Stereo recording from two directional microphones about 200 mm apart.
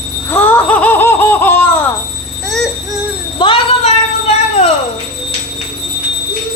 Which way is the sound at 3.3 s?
25° left (ahead or behind).